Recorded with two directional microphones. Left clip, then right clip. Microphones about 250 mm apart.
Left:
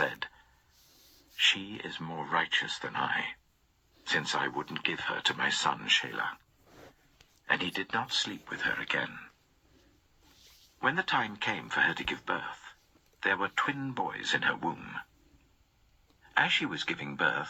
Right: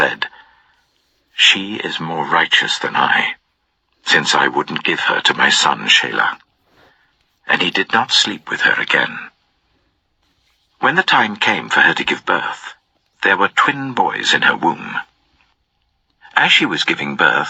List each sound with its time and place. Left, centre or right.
0.0 s a sound: right
1.4 s speech: right
10.8 s speech: right
16.2 s speech: right